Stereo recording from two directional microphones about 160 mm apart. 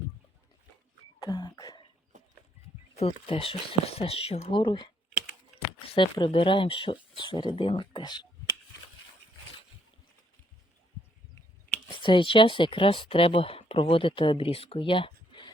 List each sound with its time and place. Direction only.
1.2 s throat clearing: 25° left (ahead or behind)
2.9 s speech: 40° left (ahead or behind)
5.9 s speech: 30° left (ahead or behind)
11.9 s speech: 30° left (ahead or behind)